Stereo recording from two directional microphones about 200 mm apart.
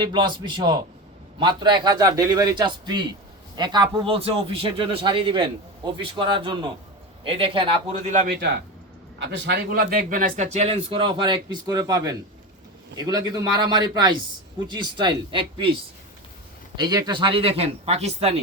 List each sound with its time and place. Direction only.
0.0 s speech: 25° right (ahead or behind)
8.1 s a man's voice: 40° right (ahead or behind)
9.1 s speech: 60° right (ahead or behind); by 18.4 s 30° right (ahead or behind)